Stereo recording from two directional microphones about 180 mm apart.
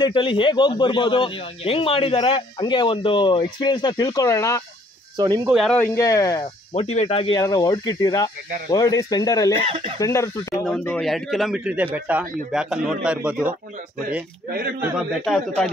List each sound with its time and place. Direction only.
0.0 s speech: 30° left (ahead or behind)
5.1 s speech: 25° right (ahead or behind)
5.5 s speech: 5° left (ahead or behind); by 6.5 s 20° left (ahead or behind)
6.7 s speech: 35° left (ahead or behind)
7.3 s speech: 20° left (ahead or behind)
9.7 s speech: 30° right (ahead or behind)
9.9 s a man's voice: 15° left (ahead or behind); by 13.6 s 5° right (ahead or behind)
14.8 s a man's voice: centre (ahead or behind)